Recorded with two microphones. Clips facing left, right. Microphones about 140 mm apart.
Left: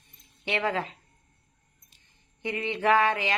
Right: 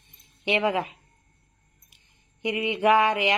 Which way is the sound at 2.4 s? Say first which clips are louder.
Right 4 dB; 15° right (ahead or behind).